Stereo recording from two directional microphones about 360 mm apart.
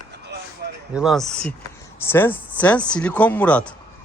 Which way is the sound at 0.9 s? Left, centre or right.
Centre.